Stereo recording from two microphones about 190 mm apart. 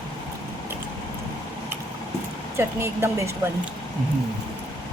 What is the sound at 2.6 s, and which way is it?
Speech, 15° right (ahead or behind).